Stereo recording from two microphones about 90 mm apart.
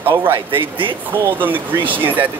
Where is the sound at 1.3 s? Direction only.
20° right (ahead or behind).